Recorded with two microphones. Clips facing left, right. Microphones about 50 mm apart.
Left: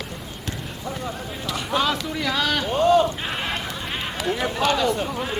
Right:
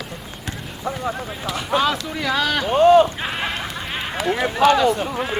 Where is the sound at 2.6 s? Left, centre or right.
Right.